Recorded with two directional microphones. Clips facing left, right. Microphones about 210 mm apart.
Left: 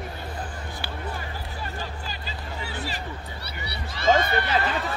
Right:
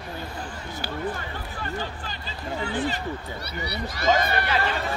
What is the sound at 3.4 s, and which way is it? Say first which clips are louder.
Speech: right 5 dB; 30° left (ahead or behind).